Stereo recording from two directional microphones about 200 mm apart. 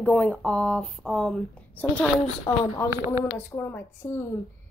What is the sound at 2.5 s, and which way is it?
A woman's voice, 15° left (ahead or behind).